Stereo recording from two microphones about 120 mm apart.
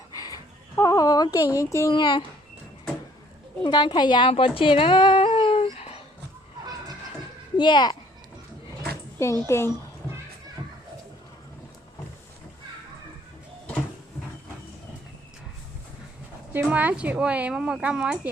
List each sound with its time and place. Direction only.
0.1 s a sound: 30° left (ahead or behind)
1.9 s a woman's voice: 40° left (ahead or behind)
3.6 s a woman's voice: 40° left (ahead or behind)
4.3 s a sound: 50° left (ahead or behind)
7.5 s a child's voice: 40° left (ahead or behind)
9.1 s a child's voice: 25° left (ahead or behind)
16.5 s speech: 15° right (ahead or behind)